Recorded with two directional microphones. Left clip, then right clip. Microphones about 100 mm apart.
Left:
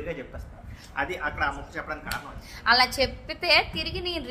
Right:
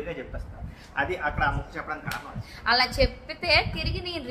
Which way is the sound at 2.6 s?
45° left (ahead or behind).